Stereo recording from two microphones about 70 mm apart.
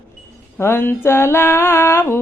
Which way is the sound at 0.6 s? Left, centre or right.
Left.